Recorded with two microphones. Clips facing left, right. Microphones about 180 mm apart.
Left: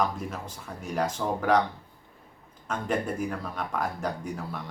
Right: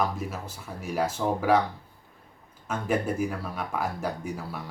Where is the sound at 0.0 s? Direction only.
10° right (ahead or behind).